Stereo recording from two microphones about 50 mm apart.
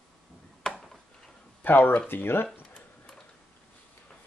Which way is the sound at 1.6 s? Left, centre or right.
Left.